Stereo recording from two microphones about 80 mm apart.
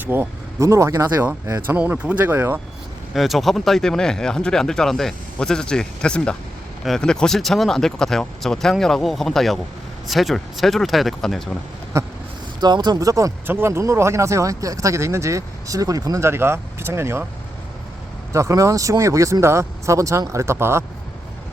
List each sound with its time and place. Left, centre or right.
0.0 s speech: right
0.6 s speech: right
1.6 s speech: right
3.2 s speech: centre
11.9 s a sound: right
12.5 s speech: right
13.5 s speech: right
16.2 s speech: right
18.3 s speech: right